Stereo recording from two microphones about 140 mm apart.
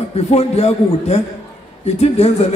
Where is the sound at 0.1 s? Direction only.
45° left (ahead or behind).